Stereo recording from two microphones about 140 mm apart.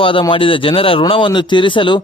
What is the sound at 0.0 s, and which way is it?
Speech, 40° left (ahead or behind).